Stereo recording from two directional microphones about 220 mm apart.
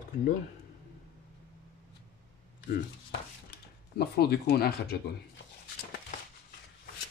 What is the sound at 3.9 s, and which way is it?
Speech, 45° left (ahead or behind).